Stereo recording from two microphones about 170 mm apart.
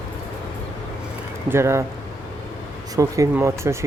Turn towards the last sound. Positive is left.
turn(degrees=-15)  # may be behind; listen again after turning